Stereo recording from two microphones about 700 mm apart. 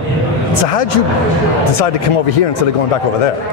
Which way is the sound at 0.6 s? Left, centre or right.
Left.